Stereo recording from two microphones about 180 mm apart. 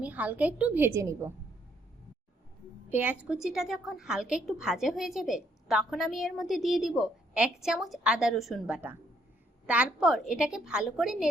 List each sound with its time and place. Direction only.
0.0 s a woman's voice: 10° right (ahead or behind)
2.9 s a woman's voice: 10° right (ahead or behind)